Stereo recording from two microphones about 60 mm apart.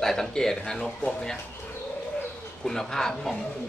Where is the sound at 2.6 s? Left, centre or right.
Centre.